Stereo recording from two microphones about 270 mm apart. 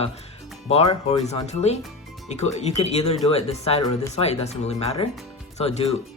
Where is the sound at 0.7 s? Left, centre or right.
Left.